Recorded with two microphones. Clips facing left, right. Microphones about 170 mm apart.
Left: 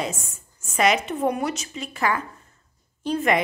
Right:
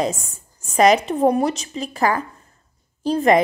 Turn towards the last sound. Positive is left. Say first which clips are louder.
# right 6 dB
turn(degrees=-35)  # may be behind; listen again after turning